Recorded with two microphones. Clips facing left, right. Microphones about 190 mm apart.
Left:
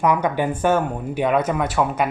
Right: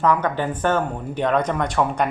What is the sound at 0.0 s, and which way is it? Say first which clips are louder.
Speech: left 1 dB; 10° left (ahead or behind).